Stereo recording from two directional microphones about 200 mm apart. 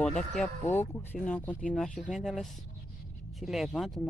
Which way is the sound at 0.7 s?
10° left (ahead or behind).